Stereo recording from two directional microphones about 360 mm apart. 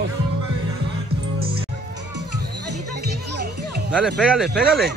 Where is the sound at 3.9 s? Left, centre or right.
Centre.